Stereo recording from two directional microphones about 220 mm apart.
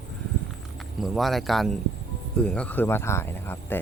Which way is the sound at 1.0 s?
Centre (ahead or behind).